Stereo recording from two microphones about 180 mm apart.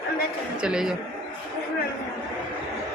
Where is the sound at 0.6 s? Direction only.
5° right (ahead or behind).